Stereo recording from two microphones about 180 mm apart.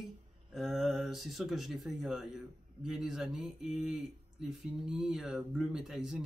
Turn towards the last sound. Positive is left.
turn(degrees=-5)  # may be behind; listen again after turning